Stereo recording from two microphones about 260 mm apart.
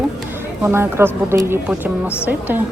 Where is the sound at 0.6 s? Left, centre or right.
Centre.